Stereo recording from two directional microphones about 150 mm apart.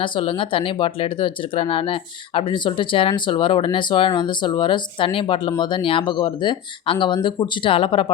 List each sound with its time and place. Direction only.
0.0 s speech: 35° left (ahead or behind)